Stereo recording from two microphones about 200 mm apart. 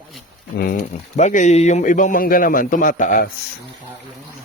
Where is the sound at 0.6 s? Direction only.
40° left (ahead or behind).